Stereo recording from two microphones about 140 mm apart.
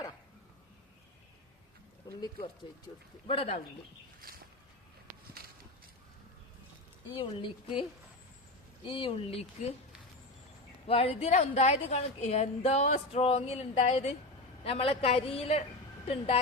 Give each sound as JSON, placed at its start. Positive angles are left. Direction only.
{"t": 3.2, "sound": "a woman's voice", "side_deg": 45}
{"t": 7.1, "sound": "a woman's voice", "side_deg": 40}
{"t": 10.8, "sound": "a woman's voice", "side_deg": 45}